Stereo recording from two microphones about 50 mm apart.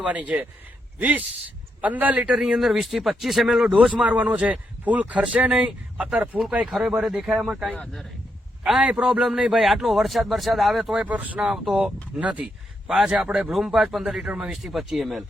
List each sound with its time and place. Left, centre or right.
0.0 s a man's voice: right
2.4 s a man's voice: centre
4.0 s a man's voice: right
6.7 s a man's voice: centre
8.6 s a man's voice: centre
10.9 s a man's voice: right
11.3 s speech: centre
12.1 s a man's voice: right
12.9 s speech: centre
14.6 s a man's voice: centre